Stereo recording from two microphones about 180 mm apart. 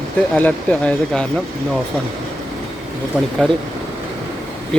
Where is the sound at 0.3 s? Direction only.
10° left (ahead or behind).